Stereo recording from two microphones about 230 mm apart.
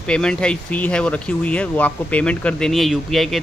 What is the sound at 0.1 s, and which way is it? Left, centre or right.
A man's voice, centre.